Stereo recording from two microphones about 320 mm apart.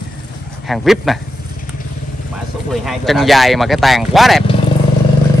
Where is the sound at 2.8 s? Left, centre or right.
Centre.